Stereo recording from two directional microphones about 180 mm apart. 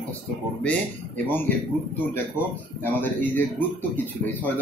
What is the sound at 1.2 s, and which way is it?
Speech, 10° left (ahead or behind).